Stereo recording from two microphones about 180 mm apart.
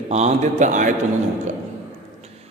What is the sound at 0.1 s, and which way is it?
Speech, 40° right (ahead or behind).